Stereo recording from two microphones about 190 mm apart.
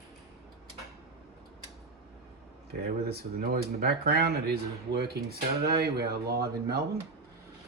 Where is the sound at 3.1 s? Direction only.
60° right (ahead or behind).